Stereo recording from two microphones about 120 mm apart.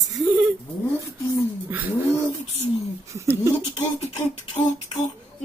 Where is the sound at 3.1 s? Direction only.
25° right (ahead or behind).